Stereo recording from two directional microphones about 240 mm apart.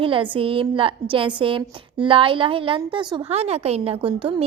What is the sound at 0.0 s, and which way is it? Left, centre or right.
A woman's voice, right.